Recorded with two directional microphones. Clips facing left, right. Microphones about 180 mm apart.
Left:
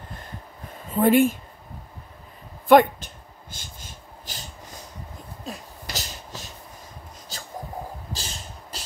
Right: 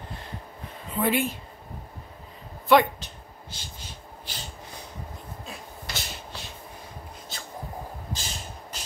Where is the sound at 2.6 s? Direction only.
50° left (ahead or behind).